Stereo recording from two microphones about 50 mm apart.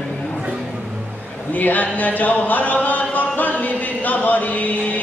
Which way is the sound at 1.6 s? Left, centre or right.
Left.